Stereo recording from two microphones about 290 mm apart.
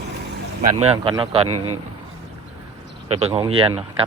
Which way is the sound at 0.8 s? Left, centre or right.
Centre.